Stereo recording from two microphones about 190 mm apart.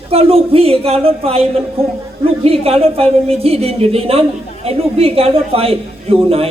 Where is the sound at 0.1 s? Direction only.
30° right (ahead or behind).